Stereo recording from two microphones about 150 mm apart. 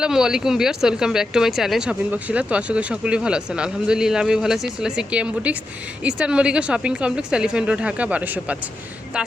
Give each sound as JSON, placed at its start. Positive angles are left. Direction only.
{"t": 0.0, "sound": "a woman's voice", "side_deg": -5}